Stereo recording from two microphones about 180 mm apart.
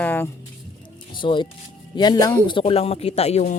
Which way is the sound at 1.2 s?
25° left (ahead or behind).